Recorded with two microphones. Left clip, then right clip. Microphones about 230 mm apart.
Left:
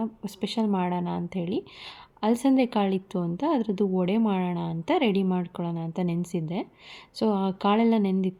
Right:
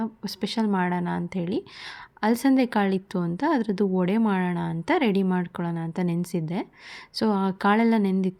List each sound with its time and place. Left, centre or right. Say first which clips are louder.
0.0 s speech: right 1 dB; right